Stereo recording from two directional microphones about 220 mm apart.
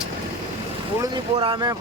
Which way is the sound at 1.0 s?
20° right (ahead or behind).